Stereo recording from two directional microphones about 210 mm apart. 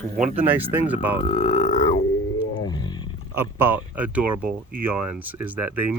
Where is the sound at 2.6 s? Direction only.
20° left (ahead or behind).